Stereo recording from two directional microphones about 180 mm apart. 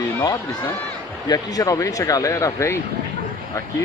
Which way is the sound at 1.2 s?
20° left (ahead or behind).